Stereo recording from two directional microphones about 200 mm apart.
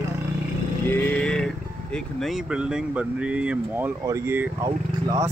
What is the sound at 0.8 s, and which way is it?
Vehicle, 10° left (ahead or behind).